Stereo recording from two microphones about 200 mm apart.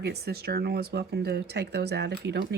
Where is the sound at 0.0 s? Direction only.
55° right (ahead or behind).